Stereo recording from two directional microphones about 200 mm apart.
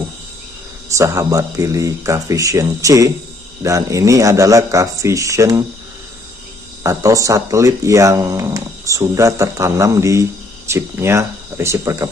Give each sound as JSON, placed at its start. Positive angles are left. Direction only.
{"t": 0.9, "sound": "speech", "side_deg": -15}
{"t": 6.8, "sound": "speech", "side_deg": -15}